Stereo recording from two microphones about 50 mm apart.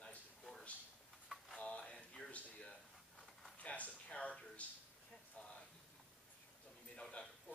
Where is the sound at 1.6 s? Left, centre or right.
Left.